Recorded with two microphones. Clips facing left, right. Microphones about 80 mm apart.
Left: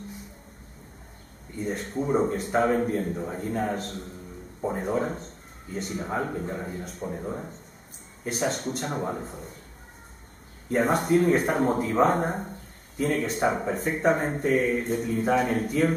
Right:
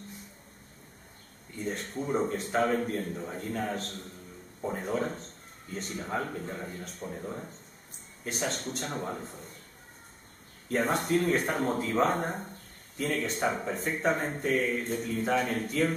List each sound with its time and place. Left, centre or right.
1.7 s speech: centre
10.7 s speech: centre